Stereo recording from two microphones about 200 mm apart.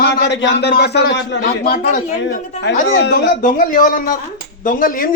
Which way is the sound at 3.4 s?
40° left (ahead or behind).